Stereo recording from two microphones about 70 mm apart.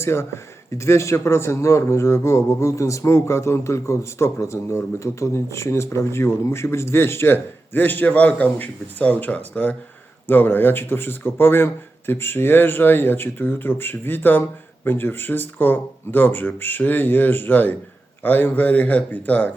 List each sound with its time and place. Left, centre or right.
0.0 s a man's voice: left